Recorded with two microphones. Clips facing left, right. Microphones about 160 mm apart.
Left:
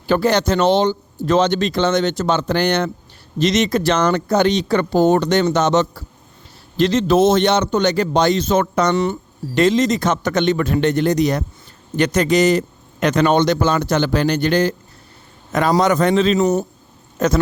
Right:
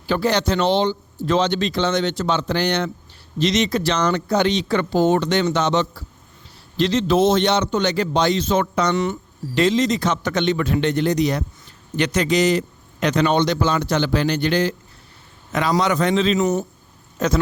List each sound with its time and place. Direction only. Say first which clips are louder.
0.1 s a man's voice: left 3 dB; 50° left (ahead or behind)
15.8 s a man's voice: left 4 dB; 45° left (ahead or behind)